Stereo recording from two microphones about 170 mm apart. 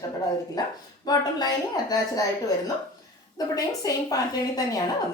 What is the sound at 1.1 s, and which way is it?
Speech, 20° left (ahead or behind).